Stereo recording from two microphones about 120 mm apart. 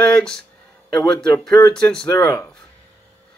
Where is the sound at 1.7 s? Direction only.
5° left (ahead or behind).